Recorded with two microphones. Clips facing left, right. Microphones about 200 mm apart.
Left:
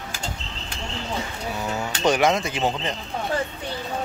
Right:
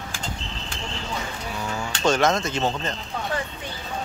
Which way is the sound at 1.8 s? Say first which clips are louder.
Left 1 dB; 15° left (ahead or behind).